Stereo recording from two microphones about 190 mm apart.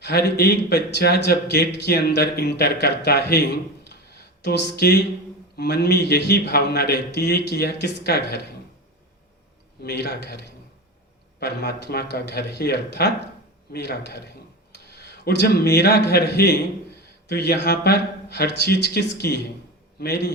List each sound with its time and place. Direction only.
0.0 s a man's voice: 55° left (ahead or behind)
9.8 s a man's voice: 60° left (ahead or behind)
14.9 s a sound: 60° left (ahead or behind)
15.7 s a man's voice: 60° left (ahead or behind)